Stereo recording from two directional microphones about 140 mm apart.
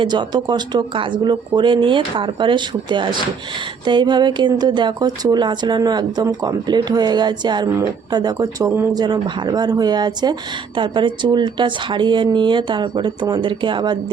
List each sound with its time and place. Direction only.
0.0 s speech: 35° right (ahead or behind)